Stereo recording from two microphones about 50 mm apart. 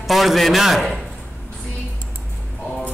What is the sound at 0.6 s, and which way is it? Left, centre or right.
Speech, centre.